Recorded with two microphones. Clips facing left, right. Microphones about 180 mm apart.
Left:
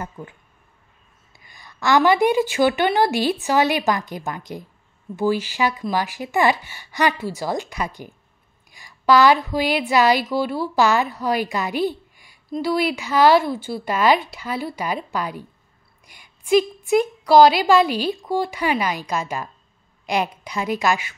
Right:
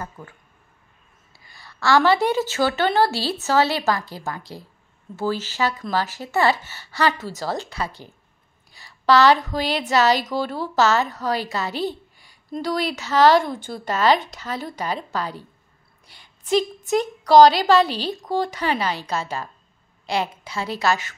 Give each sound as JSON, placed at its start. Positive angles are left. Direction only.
{"t": 1.4, "sound": "a woman's voice", "side_deg": 15}